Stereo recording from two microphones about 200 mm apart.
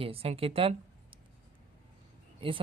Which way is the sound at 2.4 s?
25° right (ahead or behind).